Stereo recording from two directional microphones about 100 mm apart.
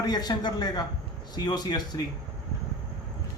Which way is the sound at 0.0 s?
40° left (ahead or behind).